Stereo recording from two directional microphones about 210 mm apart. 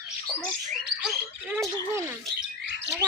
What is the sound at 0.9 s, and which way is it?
Speech, 5° right (ahead or behind).